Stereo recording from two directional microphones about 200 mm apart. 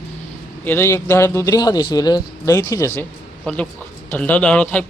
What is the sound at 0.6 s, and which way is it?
A man's voice, 10° left (ahead or behind).